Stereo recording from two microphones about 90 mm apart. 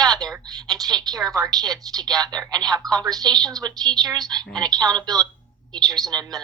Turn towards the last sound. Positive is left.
turn(degrees=-45)  # may be behind; listen again after turning